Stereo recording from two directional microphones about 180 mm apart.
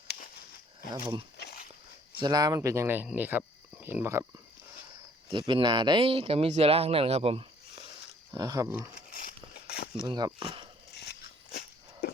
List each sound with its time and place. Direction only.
0.9 s speech: 25° right (ahead or behind)
1.4 s a sound: 60° left (ahead or behind)
2.1 s speech: 25° right (ahead or behind)
5.3 s speech: 25° right (ahead or behind)
8.3 s speech: 20° right (ahead or behind)
9.1 s a sound: 55° left (ahead or behind)
10.1 s speech: 25° right (ahead or behind)
10.9 s dog: 65° left (ahead or behind)